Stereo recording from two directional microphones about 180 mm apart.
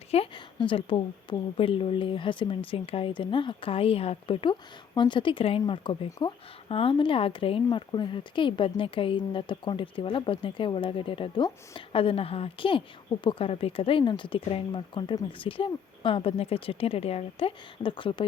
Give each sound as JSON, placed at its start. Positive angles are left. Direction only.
{"t": 0.1, "sound": "a woman's voice", "side_deg": 30}